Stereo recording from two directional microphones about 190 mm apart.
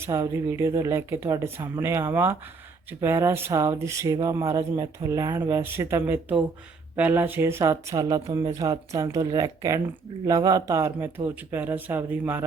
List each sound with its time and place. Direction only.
0.0 s speech: 15° right (ahead or behind)